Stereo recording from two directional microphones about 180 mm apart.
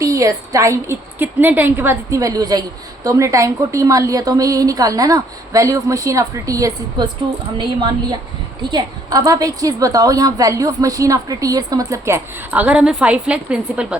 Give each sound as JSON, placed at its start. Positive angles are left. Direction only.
{"t": 0.0, "sound": "a woman's voice", "side_deg": -20}
{"t": 8.7, "sound": "a woman's voice", "side_deg": -20}